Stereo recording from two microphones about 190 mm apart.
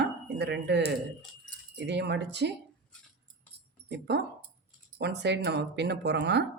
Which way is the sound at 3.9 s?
65° right (ahead or behind).